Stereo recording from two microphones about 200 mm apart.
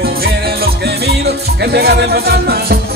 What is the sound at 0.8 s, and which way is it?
Music, 55° right (ahead or behind).